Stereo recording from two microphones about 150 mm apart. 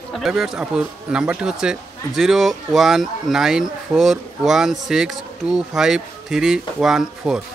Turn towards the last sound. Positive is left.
turn(degrees=-5)  # may be behind; listen again after turning